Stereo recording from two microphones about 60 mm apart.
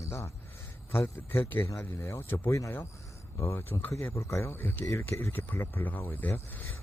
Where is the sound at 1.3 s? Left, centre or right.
Left.